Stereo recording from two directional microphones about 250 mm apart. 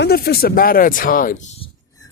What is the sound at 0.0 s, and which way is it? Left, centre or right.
Speech, left.